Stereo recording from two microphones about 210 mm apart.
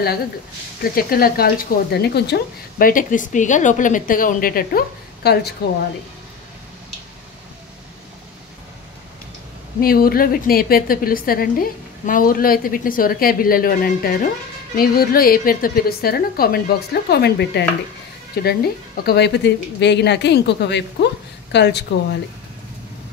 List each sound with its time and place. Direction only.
0.8 s a woman's voice: 45° left (ahead or behind)
9.8 s a woman's voice: 45° left (ahead or behind)